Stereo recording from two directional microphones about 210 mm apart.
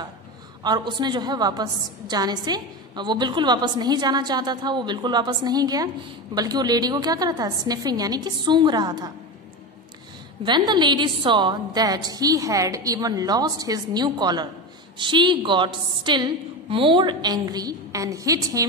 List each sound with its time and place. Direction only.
0.7 s a woman's voice: 20° right (ahead or behind)
10.4 s a woman's voice: 20° right (ahead or behind)